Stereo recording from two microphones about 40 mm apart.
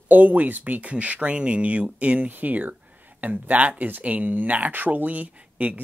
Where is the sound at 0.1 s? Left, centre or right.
Right.